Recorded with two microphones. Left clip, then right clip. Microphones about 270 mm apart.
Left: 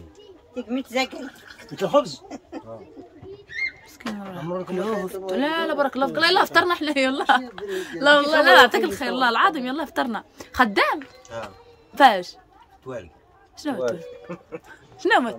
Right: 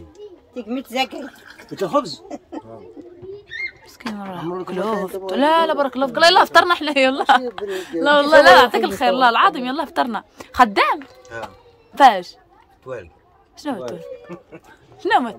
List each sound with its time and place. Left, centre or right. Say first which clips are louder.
0.6 s speech: right 2 dB; right
2.2 s a sound: right 4 dB; right
4.3 s speech: right 2 dB; centre
13.6 s speech: left 2 dB; centre
15.0 s speech: right 2 dB; centre